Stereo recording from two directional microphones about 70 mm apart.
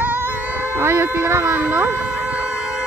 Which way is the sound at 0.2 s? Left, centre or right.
Right.